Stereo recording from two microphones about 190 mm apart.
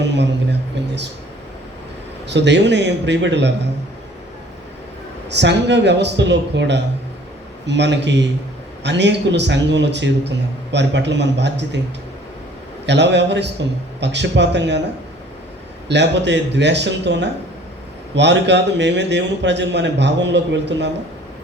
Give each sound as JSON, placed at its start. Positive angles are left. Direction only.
{"t": 0.0, "sound": "speech", "side_deg": -65}
{"t": 2.2, "sound": "a man's voice", "side_deg": -65}
{"t": 5.3, "sound": "a man's voice", "side_deg": -65}
{"t": 12.8, "sound": "a man's voice", "side_deg": -65}
{"t": 15.9, "sound": "a man's voice", "side_deg": -65}